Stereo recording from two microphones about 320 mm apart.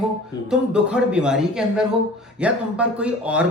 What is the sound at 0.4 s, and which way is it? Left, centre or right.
A man's voice, centre.